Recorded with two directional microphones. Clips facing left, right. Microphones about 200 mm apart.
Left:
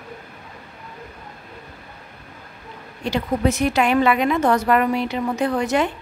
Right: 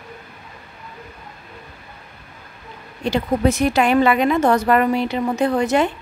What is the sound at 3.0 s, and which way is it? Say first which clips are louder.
A woman's voice: right 2 dB; 30° right (ahead or behind).